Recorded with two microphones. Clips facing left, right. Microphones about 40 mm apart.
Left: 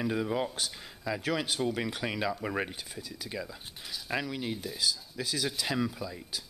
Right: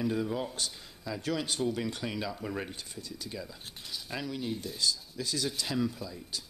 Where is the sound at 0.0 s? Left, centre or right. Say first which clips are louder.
Left 1 dB; left.